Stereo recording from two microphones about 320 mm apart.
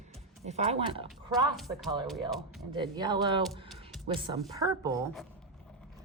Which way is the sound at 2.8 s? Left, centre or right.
Centre.